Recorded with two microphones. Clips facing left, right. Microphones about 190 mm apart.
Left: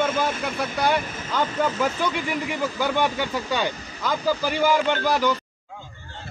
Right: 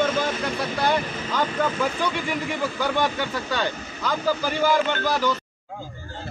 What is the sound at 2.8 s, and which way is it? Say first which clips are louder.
Speech: left 1 dB; 15° left (ahead or behind).